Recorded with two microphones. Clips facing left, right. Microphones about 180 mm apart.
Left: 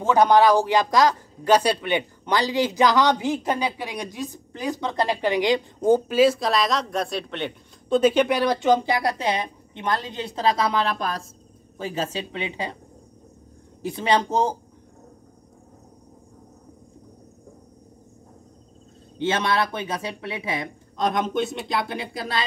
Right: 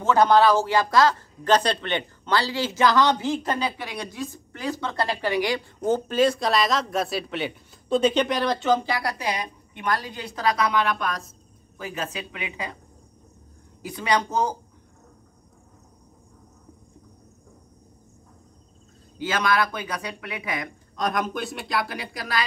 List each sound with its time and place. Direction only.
0.0 s a woman's voice: 15° left (ahead or behind); by 12.7 s 30° left (ahead or behind)
13.8 s speech: 25° left (ahead or behind)
19.1 s speech: 25° left (ahead or behind)